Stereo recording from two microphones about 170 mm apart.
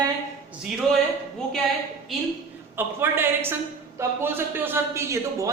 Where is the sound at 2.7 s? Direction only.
15° right (ahead or behind).